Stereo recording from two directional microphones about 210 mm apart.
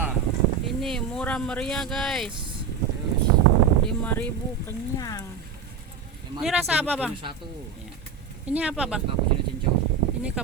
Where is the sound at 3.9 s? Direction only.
5° left (ahead or behind).